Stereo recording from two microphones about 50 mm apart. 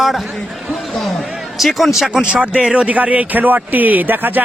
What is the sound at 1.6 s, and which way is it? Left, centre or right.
Speech, centre.